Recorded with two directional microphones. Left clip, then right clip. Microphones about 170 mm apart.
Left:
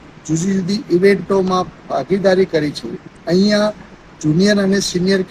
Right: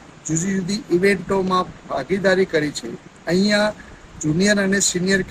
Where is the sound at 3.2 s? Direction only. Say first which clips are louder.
Left 3 dB; 30° right (ahead or behind).